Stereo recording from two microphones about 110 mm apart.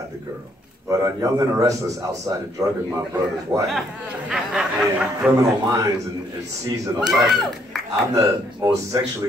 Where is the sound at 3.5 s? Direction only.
30° right (ahead or behind).